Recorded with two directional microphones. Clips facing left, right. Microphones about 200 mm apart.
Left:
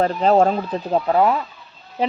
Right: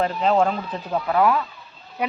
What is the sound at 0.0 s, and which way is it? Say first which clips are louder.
Speech: left 4 dB; 40° left (ahead or behind).